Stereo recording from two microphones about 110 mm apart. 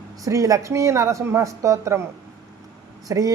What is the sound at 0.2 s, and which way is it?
A woman's voice, 30° right (ahead or behind).